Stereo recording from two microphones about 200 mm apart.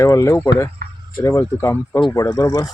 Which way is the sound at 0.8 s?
50° right (ahead or behind).